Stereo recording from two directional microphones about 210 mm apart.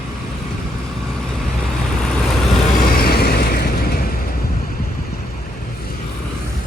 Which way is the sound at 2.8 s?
45° left (ahead or behind).